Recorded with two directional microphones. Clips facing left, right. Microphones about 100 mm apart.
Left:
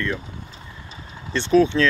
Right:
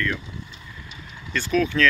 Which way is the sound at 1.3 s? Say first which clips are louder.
Left 6 dB; 30° left (ahead or behind).